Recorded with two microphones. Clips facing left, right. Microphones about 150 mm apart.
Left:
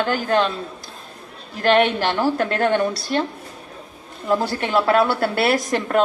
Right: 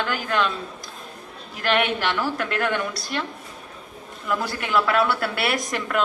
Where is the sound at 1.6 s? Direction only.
35° left (ahead or behind).